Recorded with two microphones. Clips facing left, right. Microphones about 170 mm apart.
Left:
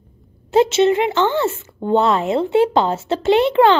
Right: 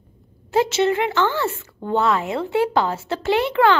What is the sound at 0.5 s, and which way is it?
Speech, 20° left (ahead or behind).